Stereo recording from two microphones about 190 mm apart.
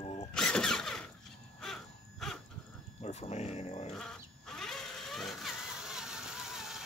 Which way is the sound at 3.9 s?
5° left (ahead or behind).